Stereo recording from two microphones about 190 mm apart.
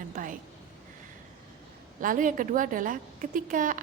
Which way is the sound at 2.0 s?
45° right (ahead or behind).